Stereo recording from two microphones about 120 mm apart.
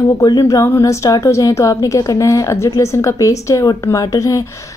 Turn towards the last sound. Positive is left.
turn(degrees=30)  # may be behind; listen again after turning